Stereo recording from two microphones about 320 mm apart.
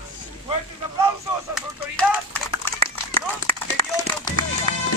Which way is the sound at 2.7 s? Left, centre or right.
Centre.